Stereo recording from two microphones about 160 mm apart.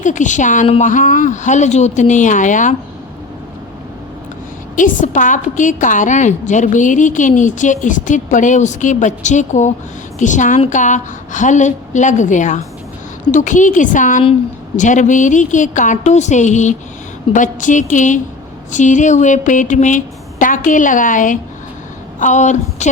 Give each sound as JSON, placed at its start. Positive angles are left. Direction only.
{"t": 0.0, "sound": "a woman's voice", "side_deg": 50}
{"t": 4.8, "sound": "a woman's voice", "side_deg": 55}